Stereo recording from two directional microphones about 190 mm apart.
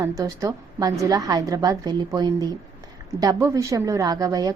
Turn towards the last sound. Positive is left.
turn(degrees=-20)  # may be behind; listen again after turning